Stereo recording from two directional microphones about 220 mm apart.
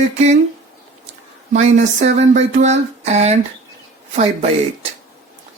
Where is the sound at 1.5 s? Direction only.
30° right (ahead or behind).